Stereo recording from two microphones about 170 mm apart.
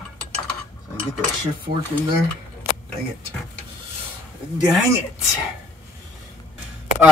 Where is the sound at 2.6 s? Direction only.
15° right (ahead or behind).